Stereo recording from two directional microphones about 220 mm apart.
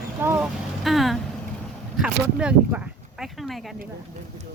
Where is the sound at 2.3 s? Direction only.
5° right (ahead or behind).